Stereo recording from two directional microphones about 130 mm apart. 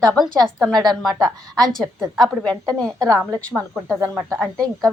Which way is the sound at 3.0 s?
25° right (ahead or behind).